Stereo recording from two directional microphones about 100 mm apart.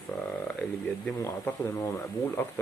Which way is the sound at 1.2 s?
25° left (ahead or behind).